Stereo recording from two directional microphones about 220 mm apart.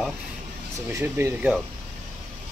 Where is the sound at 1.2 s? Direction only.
15° right (ahead or behind).